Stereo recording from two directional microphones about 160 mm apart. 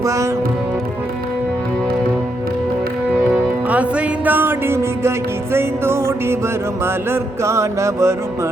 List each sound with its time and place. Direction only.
0.0 s music: 20° right (ahead or behind)
3.7 s music: 10° right (ahead or behind)